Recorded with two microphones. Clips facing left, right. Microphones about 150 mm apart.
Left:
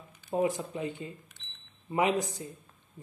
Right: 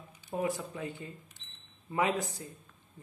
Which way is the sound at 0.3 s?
25° left (ahead or behind).